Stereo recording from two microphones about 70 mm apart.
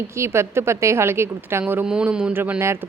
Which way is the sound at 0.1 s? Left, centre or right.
Right.